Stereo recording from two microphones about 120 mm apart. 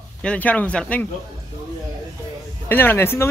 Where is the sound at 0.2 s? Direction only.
10° left (ahead or behind).